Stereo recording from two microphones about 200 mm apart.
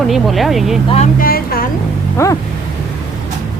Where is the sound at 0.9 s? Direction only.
40° left (ahead or behind).